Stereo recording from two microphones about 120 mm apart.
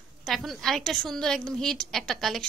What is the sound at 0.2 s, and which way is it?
A woman's voice, centre (ahead or behind).